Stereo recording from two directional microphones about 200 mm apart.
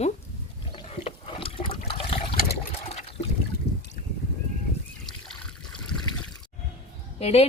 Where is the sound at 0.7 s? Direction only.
30° left (ahead or behind).